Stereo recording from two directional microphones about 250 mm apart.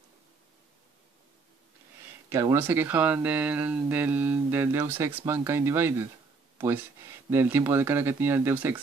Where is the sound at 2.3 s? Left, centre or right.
Centre.